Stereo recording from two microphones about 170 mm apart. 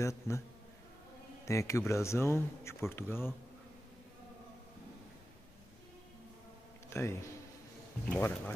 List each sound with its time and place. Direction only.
0.0 s a man's voice: 15° left (ahead or behind)
1.4 s a man's voice: 20° left (ahead or behind)
6.9 s a man's voice: 15° left (ahead or behind)